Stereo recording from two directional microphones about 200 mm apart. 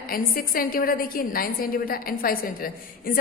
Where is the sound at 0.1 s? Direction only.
45° left (ahead or behind).